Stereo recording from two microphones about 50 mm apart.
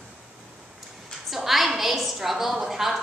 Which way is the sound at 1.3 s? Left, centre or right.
Centre.